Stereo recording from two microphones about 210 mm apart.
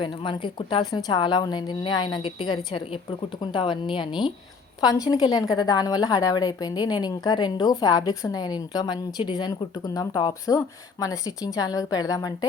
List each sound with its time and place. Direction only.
0.0 s a woman's voice: 25° left (ahead or behind)